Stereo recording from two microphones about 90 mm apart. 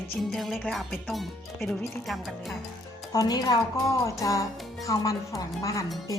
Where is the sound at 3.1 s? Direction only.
45° left (ahead or behind).